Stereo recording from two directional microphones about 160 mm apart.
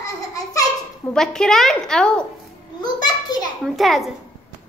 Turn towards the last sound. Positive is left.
turn(degrees=0)  # may be behind; listen again after turning